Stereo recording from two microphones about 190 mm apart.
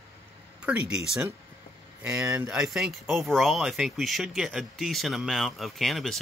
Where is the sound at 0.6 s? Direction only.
5° right (ahead or behind).